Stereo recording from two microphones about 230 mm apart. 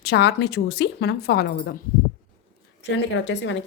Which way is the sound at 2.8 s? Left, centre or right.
Left.